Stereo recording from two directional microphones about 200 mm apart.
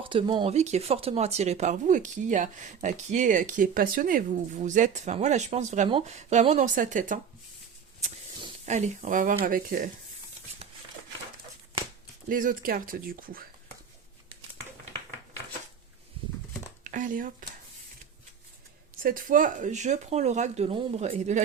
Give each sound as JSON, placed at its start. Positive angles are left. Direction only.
{"t": 0.0, "sound": "speech", "side_deg": -25}
{"t": 8.6, "sound": "speech", "side_deg": -35}
{"t": 12.3, "sound": "speech", "side_deg": -45}
{"t": 16.8, "sound": "speech", "side_deg": -40}
{"t": 19.0, "sound": "speech", "side_deg": -45}